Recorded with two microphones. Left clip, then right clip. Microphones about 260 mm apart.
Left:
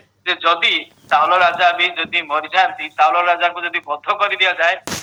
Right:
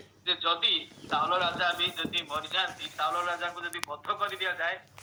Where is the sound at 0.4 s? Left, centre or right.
Left.